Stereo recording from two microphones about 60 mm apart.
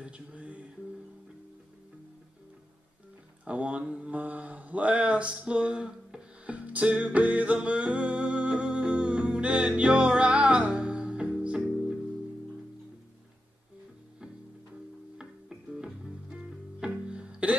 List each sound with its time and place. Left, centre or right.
0.0 s music: centre
3.4 s mantra: right
9.8 s music: centre
15.7 s music: centre